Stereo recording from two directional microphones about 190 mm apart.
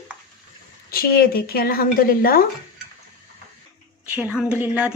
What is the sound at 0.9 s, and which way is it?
Speech, 50° left (ahead or behind).